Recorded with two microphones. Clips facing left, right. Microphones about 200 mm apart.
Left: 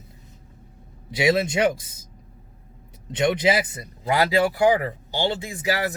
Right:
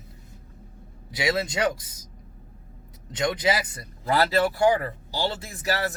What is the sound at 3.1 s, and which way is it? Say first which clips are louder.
Speech: left 4 dB; 20° left (ahead or behind).